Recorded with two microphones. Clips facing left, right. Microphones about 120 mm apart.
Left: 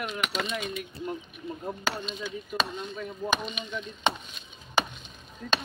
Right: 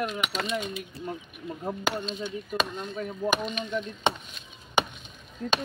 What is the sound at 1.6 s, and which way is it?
Speech, 25° right (ahead or behind).